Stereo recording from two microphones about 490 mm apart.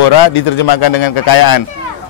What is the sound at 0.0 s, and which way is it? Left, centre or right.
A man's voice, left.